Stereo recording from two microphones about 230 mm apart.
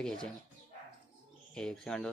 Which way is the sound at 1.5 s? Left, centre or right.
Centre.